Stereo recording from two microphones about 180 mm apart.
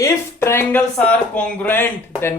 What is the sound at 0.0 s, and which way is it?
Speech, 15° left (ahead or behind).